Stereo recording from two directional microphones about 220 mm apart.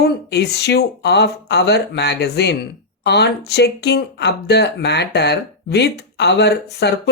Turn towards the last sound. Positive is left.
turn(degrees=50)  # may be behind; listen again after turning